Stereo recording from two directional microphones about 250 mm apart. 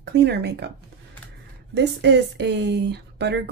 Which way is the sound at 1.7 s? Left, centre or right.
Right.